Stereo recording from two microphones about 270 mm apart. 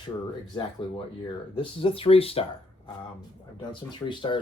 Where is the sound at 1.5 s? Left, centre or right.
Centre.